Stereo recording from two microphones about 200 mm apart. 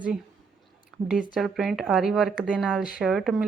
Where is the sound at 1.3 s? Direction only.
Centre (ahead or behind).